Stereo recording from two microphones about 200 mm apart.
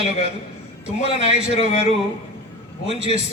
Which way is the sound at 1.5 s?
30° left (ahead or behind).